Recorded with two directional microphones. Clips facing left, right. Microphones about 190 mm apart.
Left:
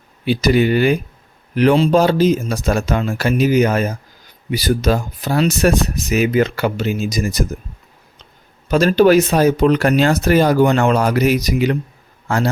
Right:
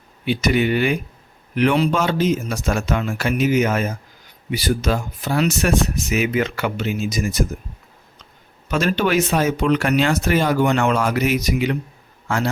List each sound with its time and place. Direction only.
0.3 s speech: 35° left (ahead or behind)
8.7 s speech: 35° left (ahead or behind)